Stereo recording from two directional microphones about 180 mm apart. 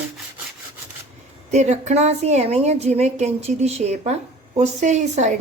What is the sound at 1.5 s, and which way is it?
A woman's voice, 40° right (ahead or behind).